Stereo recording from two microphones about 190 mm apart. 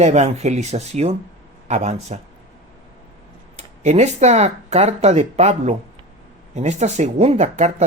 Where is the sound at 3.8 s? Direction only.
35° right (ahead or behind).